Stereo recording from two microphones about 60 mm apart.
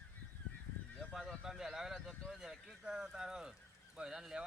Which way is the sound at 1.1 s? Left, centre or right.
Centre.